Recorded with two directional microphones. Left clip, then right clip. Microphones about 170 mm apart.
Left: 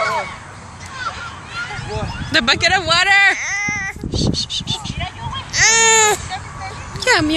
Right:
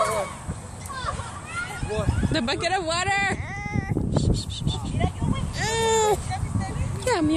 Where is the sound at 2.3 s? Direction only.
5° right (ahead or behind).